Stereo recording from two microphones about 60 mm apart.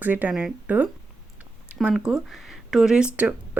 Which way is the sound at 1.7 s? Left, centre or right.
Right.